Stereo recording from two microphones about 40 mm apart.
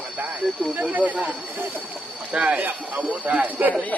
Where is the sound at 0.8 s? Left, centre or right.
Right.